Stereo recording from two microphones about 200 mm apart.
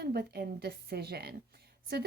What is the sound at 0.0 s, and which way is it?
Speech, 55° right (ahead or behind).